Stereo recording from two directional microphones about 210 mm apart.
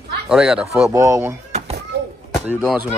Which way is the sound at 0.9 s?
15° right (ahead or behind).